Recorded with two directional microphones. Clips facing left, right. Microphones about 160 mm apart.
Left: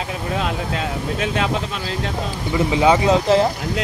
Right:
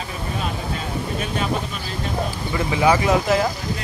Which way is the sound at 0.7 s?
90° left.